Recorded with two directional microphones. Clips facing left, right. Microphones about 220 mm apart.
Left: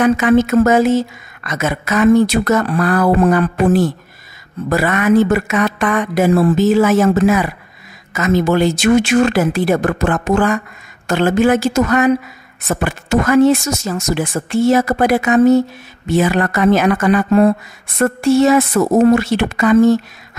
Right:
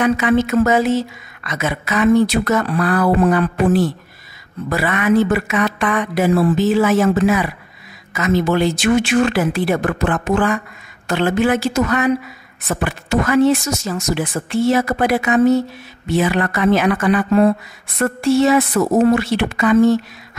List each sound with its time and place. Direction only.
0.0 s speech: 45° left (ahead or behind)